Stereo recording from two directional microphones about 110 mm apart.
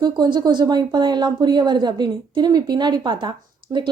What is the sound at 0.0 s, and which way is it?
Speech, 40° right (ahead or behind).